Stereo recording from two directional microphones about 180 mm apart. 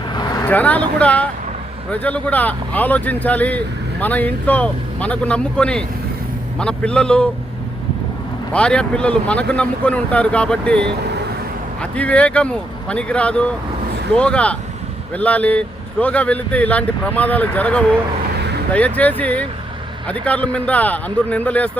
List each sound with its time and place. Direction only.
0.1 s vehicle: 25° left (ahead or behind)
0.4 s a man's voice: 10° left (ahead or behind)
8.5 s speech: 5° left (ahead or behind)